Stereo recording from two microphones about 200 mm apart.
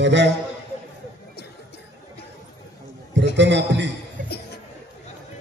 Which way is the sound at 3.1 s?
60° right (ahead or behind).